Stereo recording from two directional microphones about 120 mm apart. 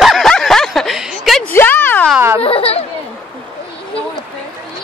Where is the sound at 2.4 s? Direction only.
55° left (ahead or behind).